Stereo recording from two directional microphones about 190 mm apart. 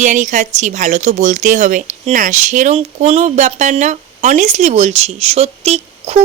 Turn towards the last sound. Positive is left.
turn(degrees=-35)  # may be behind; listen again after turning